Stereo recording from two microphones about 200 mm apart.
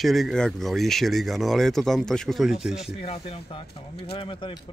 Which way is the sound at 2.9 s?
30° left (ahead or behind).